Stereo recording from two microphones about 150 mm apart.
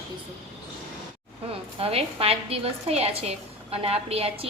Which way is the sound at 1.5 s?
40° right (ahead or behind).